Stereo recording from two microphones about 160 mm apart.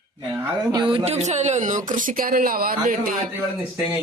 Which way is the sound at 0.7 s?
30° right (ahead or behind).